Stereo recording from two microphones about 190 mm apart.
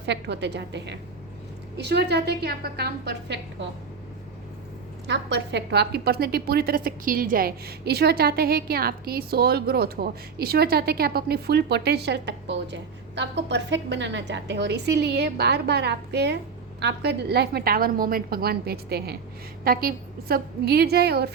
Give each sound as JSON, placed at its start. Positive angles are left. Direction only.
{"t": 0.0, "sound": "a woman's voice", "side_deg": -65}
{"t": 5.0, "sound": "a woman's voice", "side_deg": -65}